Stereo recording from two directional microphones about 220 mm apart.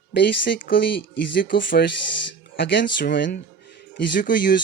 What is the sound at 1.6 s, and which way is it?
Speech, 55° left (ahead or behind).